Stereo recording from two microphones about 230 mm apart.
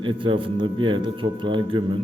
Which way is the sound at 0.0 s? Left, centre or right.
Right.